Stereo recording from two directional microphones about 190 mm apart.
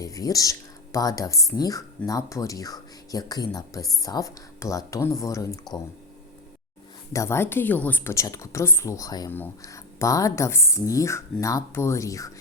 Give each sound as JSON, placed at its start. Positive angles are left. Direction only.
{"t": 0.0, "sound": "speech", "side_deg": 20}
{"t": 7.1, "sound": "speech", "side_deg": 15}